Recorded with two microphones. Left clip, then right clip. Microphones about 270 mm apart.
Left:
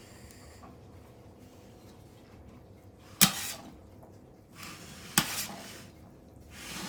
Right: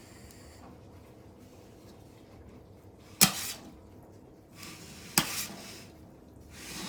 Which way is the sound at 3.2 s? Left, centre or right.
Centre.